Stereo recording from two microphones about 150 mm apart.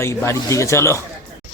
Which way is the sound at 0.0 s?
15° left (ahead or behind).